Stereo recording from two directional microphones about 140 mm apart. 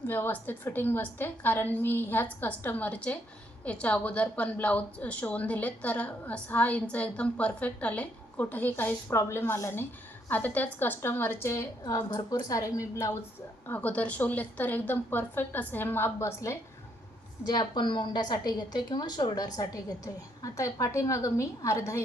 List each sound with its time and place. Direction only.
0.1 s a woman's voice: 15° left (ahead or behind)
17.4 s a woman's voice: 30° left (ahead or behind)